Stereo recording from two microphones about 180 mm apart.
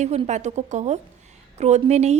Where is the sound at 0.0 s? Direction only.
40° right (ahead or behind).